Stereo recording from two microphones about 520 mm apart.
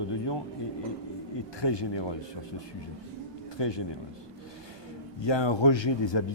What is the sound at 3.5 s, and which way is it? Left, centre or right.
Speech, left.